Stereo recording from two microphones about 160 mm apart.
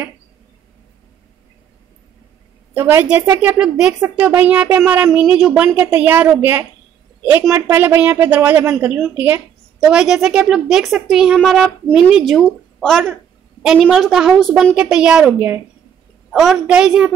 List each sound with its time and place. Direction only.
2.7 s a woman's voice: 15° right (ahead or behind)
16.3 s a woman's voice: centre (ahead or behind)